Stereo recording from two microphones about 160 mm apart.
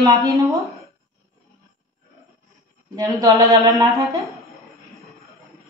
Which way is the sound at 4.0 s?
20° right (ahead or behind).